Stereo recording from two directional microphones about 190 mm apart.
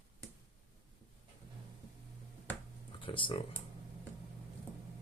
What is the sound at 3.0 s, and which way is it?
Speech, 25° left (ahead or behind).